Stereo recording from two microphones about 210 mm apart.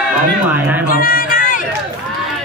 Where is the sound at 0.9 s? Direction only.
40° left (ahead or behind).